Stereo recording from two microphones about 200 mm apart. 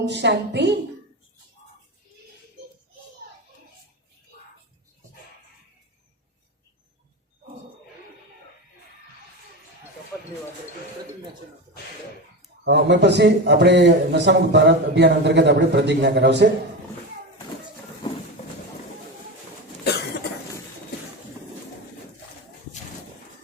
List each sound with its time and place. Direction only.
0.1 s a man's voice: 60° right (ahead or behind)
12.6 s a man's voice: 60° right (ahead or behind)
18.0 s clip-clop: 25° left (ahead or behind)